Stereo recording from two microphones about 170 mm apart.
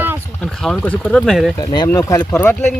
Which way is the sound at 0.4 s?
5° left (ahead or behind).